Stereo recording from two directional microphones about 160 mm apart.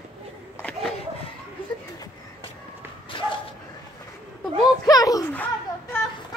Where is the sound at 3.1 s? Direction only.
30° left (ahead or behind).